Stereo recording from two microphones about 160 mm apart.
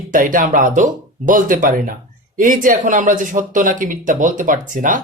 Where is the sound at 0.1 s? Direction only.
60° right (ahead or behind).